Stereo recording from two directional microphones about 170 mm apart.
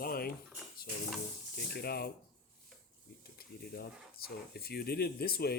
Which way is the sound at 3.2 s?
65° left (ahead or behind).